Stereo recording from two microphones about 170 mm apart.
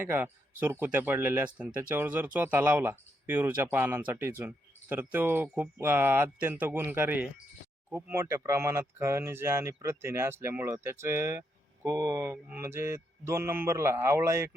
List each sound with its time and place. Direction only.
0.0 s speech: 10° right (ahead or behind)